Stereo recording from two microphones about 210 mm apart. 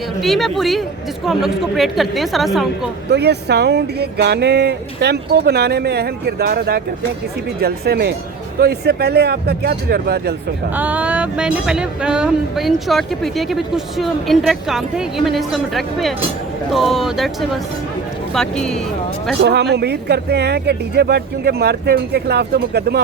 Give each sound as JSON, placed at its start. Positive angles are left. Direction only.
{"t": 0.2, "sound": "speech", "side_deg": 0}
{"t": 3.1, "sound": "speech", "side_deg": -55}
{"t": 10.8, "sound": "speech", "side_deg": -5}
{"t": 19.4, "sound": "speech", "side_deg": -55}